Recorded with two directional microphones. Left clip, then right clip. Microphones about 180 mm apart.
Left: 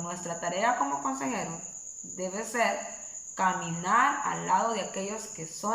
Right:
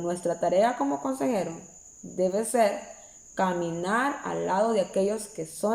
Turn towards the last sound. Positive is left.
turn(degrees=-15)  # may be behind; listen again after turning